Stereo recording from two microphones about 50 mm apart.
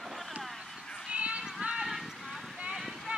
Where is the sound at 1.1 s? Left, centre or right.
Right.